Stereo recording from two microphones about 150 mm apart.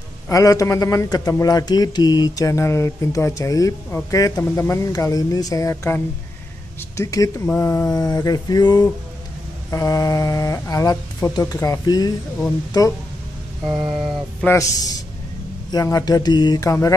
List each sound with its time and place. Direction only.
0.3 s a man's voice: 20° left (ahead or behind)
7.9 s a man's voice: 25° left (ahead or behind)
13.7 s mantra: 5° right (ahead or behind)
14.4 s a man's voice: 20° left (ahead or behind)